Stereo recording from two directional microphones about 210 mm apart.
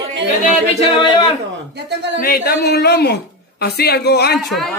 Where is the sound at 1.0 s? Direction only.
20° left (ahead or behind).